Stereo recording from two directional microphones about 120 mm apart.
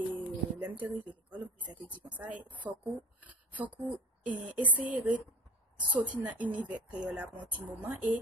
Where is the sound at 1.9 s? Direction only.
10° right (ahead or behind).